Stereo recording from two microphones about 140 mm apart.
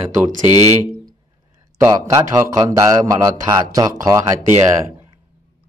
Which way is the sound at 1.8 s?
20° right (ahead or behind).